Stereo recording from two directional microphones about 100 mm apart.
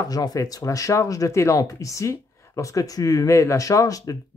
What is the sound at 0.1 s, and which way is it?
Speech, 40° left (ahead or behind).